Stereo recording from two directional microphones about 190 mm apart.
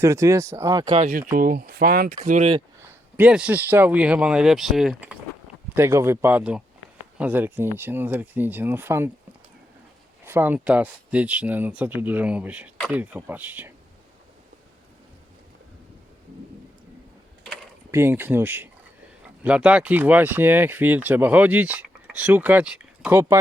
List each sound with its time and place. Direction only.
0.0 s speech: 15° right (ahead or behind)
1.3 s speech: 50° right (ahead or behind)
2.0 s speech: 40° right (ahead or behind)
2.8 s speech: 10° right (ahead or behind)
10.2 s speech: 10° right (ahead or behind)
17.9 s speech: 10° right (ahead or behind)